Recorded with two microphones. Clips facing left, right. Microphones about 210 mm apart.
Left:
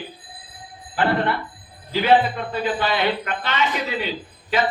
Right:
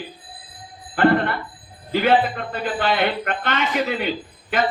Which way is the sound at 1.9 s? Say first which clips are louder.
Even; 55° right (ahead or behind).